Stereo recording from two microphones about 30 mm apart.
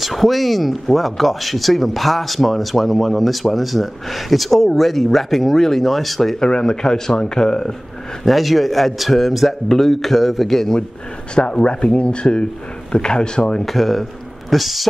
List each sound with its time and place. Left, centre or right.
0.0 s speech: centre
6.4 s a man's voice: left
8.3 s speech: centre
11.6 s a man's voice: left
13.7 s speech: centre